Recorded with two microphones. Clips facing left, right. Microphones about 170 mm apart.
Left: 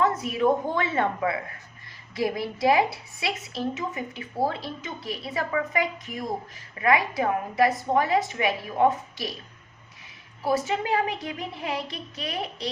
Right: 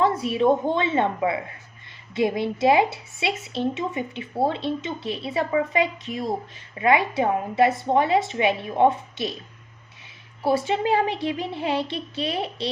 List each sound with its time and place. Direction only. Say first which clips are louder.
0.0 s a woman's voice: right 3 dB; 30° right (ahead or behind)
10.4 s a woman's voice: right 3 dB; 30° right (ahead or behind)